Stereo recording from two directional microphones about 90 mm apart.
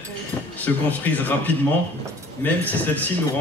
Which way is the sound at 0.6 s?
20° left (ahead or behind).